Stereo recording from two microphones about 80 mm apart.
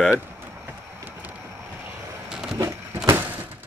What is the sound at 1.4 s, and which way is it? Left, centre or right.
Vehicle, right.